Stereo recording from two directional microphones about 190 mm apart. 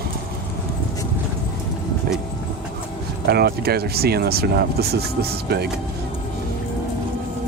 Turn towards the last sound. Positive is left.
turn(degrees=-60)  # may be behind; listen again after turning